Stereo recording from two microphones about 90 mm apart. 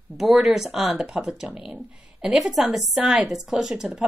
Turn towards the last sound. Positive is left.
turn(degrees=-5)  # may be behind; listen again after turning